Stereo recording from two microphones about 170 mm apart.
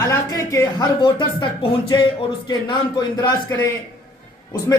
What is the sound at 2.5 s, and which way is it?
A man's voice, 25° left (ahead or behind).